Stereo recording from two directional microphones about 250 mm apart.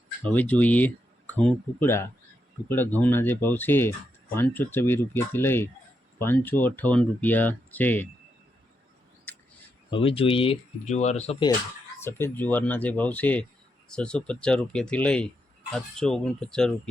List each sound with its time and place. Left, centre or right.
0.3 s speech: centre
9.9 s speech: left
11.9 s speech: centre